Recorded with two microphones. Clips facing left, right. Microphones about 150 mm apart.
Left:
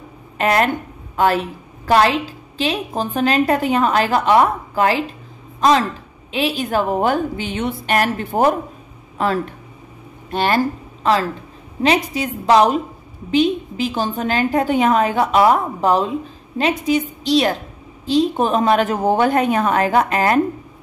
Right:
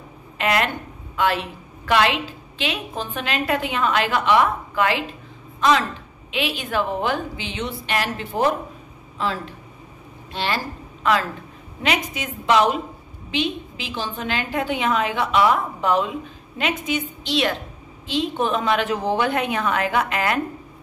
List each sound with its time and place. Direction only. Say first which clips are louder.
0.4 s a woman's voice: left 5 dB; 40° left (ahead or behind)
11.0 s a woman's voice: left 3 dB; 35° left (ahead or behind)